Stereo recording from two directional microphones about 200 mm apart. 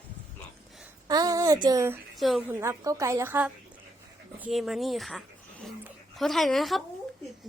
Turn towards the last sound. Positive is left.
turn(degrees=0)  # may be behind; listen again after turning